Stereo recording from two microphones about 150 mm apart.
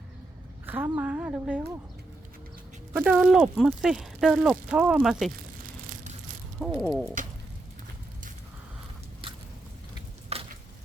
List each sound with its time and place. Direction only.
0.6 s a woman's voice: 15° right (ahead or behind)
2.9 s speech: 10° right (ahead or behind)
6.7 s speech: centre (ahead or behind)
10.3 s a sound: 45° right (ahead or behind)